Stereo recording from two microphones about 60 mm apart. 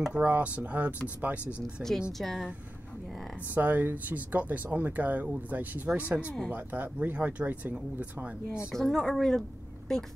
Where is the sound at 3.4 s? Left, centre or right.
Right.